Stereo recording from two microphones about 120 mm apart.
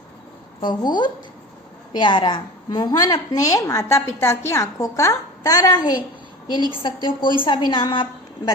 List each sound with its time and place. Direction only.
0.6 s a woman's voice: 35° left (ahead or behind)